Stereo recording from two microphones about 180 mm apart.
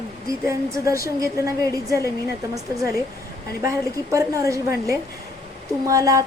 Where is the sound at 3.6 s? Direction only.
15° right (ahead or behind).